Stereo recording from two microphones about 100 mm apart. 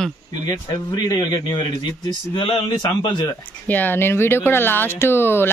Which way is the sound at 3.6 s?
15° left (ahead or behind).